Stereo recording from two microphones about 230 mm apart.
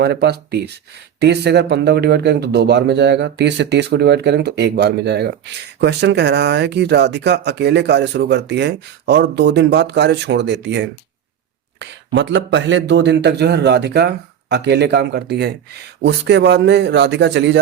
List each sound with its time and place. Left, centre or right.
0.0 s speech: right